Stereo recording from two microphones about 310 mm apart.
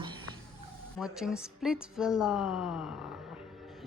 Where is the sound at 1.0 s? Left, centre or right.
Centre.